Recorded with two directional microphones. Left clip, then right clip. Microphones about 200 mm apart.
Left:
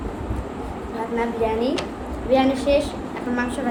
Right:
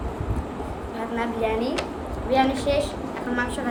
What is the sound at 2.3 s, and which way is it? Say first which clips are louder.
Speech: left 3 dB; centre (ahead or behind).